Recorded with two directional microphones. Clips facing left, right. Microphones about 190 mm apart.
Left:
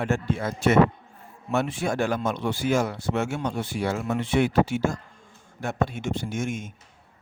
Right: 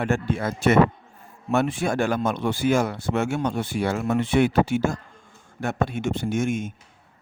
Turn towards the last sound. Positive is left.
turn(degrees=-60)  # may be behind; listen again after turning